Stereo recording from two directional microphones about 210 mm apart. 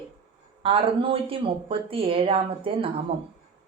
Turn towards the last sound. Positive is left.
turn(degrees=-25)  # may be behind; listen again after turning